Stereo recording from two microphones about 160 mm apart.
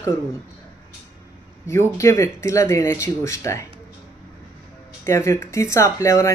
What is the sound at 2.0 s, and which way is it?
Speech, 20° left (ahead or behind).